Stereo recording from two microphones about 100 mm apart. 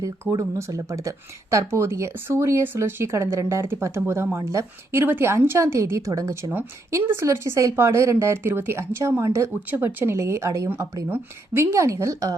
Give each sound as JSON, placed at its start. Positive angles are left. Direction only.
{"t": 0.0, "sound": "speech", "side_deg": -35}